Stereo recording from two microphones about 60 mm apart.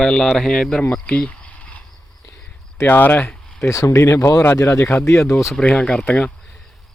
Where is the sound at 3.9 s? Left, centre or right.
Left.